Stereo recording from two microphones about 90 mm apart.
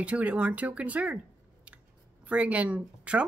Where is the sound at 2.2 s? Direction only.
15° right (ahead or behind).